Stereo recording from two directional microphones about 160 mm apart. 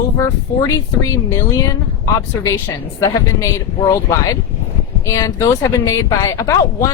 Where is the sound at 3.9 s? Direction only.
20° left (ahead or behind).